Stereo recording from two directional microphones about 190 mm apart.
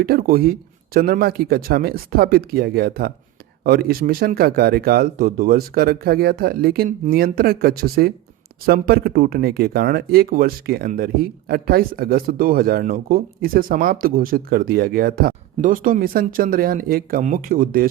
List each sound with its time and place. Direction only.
0.0 s speech: 50° right (ahead or behind)